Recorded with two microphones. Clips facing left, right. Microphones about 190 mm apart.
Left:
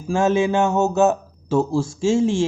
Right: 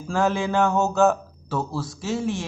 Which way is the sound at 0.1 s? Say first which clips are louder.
Left 5 dB; 20° left (ahead or behind).